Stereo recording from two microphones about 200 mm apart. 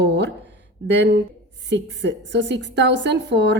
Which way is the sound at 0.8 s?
60° right (ahead or behind).